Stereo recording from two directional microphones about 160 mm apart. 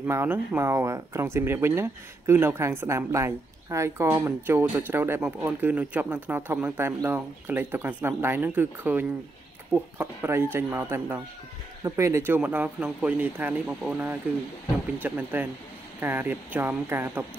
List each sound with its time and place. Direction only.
0.0 s speech: 15° right (ahead or behind)